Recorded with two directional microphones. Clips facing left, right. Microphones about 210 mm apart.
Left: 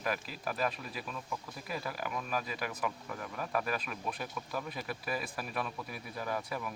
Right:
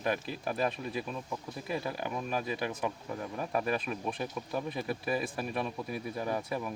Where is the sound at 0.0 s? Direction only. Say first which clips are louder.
Right 4 dB; 25° right (ahead or behind).